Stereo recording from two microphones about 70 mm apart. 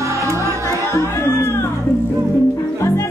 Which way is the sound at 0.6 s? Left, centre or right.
Left.